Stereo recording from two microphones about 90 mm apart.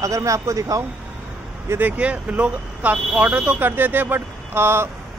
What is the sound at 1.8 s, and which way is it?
Speech, 15° right (ahead or behind).